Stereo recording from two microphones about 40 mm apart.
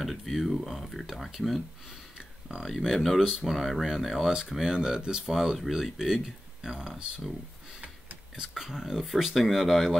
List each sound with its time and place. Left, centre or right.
0.0 s a sound: centre
0.4 s speech: centre
2.5 s speech: centre
2.9 s speech: centre
4.5 s speech: centre
5.3 s speech: centre
8.4 s speech: centre